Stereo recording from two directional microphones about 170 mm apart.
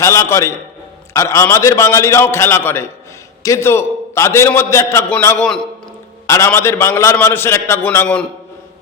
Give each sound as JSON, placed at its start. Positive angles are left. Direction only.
{"t": 0.0, "sound": "a man's voice", "side_deg": 15}